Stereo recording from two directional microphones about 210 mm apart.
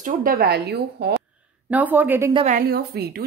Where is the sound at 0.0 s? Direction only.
40° right (ahead or behind).